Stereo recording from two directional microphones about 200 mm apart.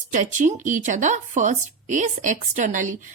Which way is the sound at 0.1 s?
40° right (ahead or behind).